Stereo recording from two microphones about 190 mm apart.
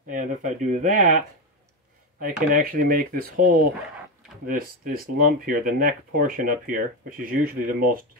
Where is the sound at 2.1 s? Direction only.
45° right (ahead or behind).